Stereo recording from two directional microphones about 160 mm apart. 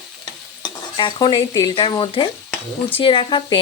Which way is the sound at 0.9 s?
30° left (ahead or behind).